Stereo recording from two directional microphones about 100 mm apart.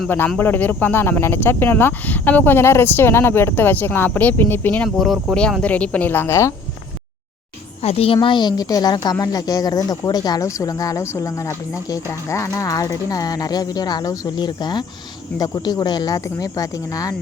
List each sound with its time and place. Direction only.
0.3 s speech: 20° left (ahead or behind)
4.9 s speech: centre (ahead or behind); by 6.5 s 25° left (ahead or behind)
7.8 s a woman's voice: 85° left; by 17.2 s 35° left (ahead or behind)